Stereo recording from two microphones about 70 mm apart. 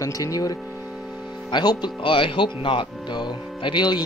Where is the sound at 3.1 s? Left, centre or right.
Left.